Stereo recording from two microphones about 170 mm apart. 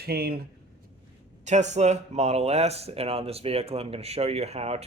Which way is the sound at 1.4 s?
45° right (ahead or behind).